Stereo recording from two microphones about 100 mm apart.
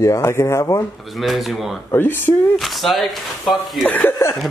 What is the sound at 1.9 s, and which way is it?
Speech, 20° left (ahead or behind).